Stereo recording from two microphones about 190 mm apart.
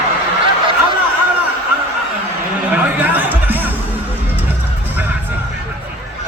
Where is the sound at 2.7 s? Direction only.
10° right (ahead or behind).